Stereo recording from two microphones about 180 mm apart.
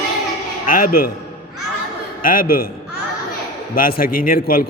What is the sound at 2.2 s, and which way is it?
Speech, 50° left (ahead or behind).